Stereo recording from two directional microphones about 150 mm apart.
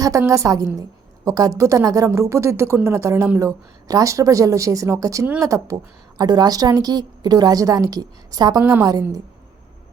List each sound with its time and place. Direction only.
0.0 s a woman's voice: 20° right (ahead or behind)
8.6 s a woman's voice: 15° right (ahead or behind)
8.9 s a woman's voice: 25° right (ahead or behind)